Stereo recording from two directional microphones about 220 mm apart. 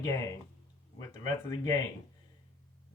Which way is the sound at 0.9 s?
15° left (ahead or behind).